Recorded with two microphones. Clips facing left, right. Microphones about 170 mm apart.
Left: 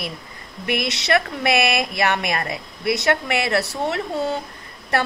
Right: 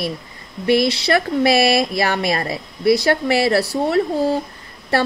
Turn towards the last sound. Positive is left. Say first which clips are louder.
# right 4 dB
turn(degrees=-30)  # may be behind; listen again after turning